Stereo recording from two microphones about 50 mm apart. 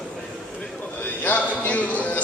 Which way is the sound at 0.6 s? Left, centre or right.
Left.